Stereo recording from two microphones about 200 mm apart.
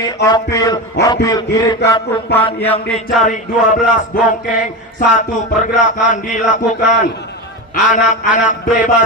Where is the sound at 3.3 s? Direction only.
40° left (ahead or behind).